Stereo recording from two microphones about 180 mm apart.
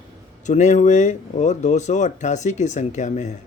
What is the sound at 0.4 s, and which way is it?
Speech, 40° left (ahead or behind).